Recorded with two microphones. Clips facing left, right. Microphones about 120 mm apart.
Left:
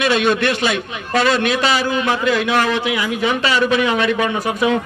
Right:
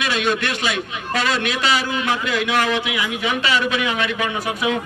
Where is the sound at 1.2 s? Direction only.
40° left (ahead or behind).